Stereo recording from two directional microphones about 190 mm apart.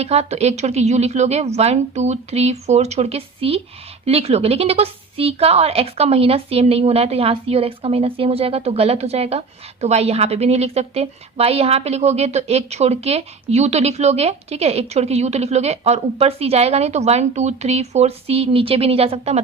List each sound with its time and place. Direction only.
0.0 s a woman's voice: 35° right (ahead or behind)